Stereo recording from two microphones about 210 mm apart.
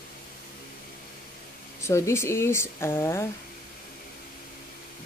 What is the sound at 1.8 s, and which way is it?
Speech, 15° left (ahead or behind).